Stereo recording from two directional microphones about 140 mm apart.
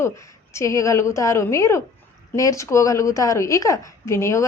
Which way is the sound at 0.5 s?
20° left (ahead or behind).